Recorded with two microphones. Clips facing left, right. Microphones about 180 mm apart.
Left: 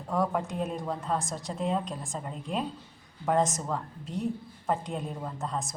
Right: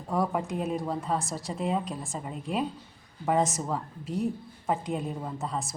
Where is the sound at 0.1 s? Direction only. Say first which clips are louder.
Right 1 dB; 10° right (ahead or behind).